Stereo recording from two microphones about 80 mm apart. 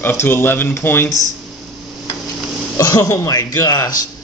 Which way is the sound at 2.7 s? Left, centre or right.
Left.